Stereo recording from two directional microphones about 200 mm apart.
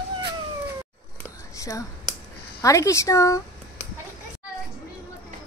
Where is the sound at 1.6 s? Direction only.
15° left (ahead or behind).